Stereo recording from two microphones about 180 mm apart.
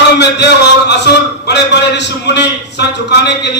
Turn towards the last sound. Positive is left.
turn(degrees=70)  # may be behind; listen again after turning